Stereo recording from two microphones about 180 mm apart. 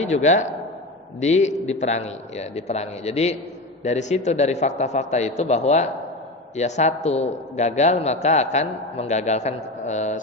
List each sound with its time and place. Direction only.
0.0 s a man's voice: 40° left (ahead or behind)